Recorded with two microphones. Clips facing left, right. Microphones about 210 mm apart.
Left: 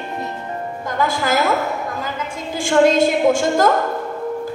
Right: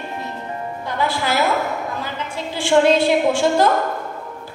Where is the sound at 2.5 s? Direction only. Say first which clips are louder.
Left 1 dB; 45° left (ahead or behind).